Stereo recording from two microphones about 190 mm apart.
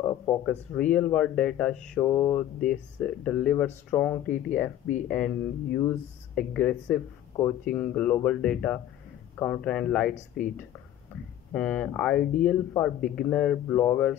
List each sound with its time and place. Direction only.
0.0 s speech: 10° left (ahead or behind)
10.1 s speech: 45° left (ahead or behind)
11.5 s speech: 5° left (ahead or behind)